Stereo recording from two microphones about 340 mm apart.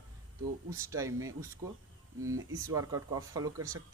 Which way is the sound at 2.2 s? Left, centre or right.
Right.